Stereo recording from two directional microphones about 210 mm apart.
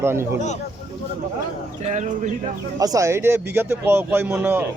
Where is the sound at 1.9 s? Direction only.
35° right (ahead or behind).